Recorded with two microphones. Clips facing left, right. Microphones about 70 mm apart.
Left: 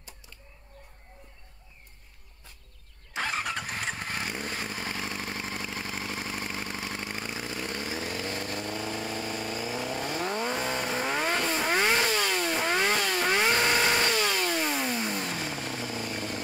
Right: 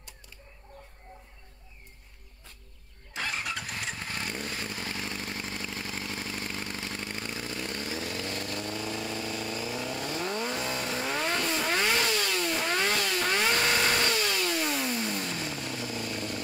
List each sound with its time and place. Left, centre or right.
3.2 s vehicle: left
14.1 s chainsaw: left
14.6 s motorcycle: left